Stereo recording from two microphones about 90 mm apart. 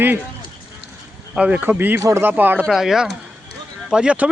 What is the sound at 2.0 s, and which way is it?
Speech, 35° right (ahead or behind).